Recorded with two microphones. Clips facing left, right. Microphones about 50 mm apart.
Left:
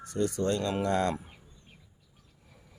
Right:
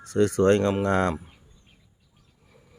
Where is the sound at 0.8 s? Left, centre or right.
Right.